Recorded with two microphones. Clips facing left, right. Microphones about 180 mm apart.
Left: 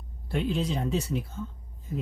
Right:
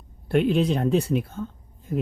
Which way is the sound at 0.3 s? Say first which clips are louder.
Right 8 dB; 60° right (ahead or behind).